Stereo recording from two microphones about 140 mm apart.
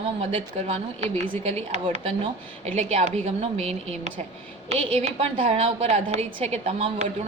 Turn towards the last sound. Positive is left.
turn(degrees=-45)  # may be behind; listen again after turning